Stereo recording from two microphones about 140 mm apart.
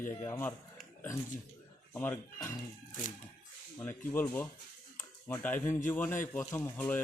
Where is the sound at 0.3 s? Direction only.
20° left (ahead or behind).